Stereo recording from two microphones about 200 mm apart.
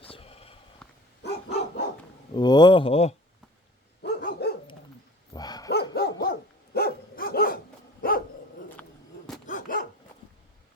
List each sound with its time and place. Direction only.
0.0 s sniff: 30° left (ahead or behind)
0.8 s dog: 5° left (ahead or behind)
1.2 s dog: 55° left (ahead or behind)
2.3 s speech: 20° left (ahead or behind)
4.0 s dog: 50° left (ahead or behind)
5.3 s dog: 20° left (ahead or behind)
5.9 s dog: 50° left (ahead or behind)
9.5 s dog: 45° left (ahead or behind)